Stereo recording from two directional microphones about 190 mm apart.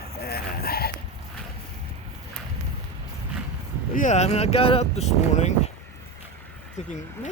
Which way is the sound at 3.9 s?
40° left (ahead or behind).